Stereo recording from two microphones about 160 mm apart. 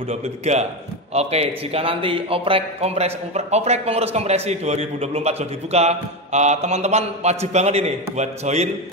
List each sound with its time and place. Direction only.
0.1 s a man's voice: 45° right (ahead or behind)